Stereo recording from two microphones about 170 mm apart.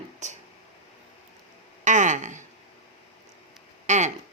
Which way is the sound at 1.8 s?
45° right (ahead or behind).